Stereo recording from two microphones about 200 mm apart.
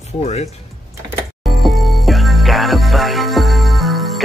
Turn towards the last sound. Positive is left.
turn(degrees=0)  # may be behind; listen again after turning